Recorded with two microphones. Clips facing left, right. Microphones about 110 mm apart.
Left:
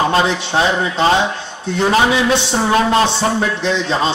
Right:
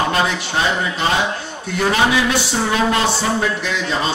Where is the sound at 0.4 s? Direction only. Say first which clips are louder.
Left 4 dB; 25° left (ahead or behind).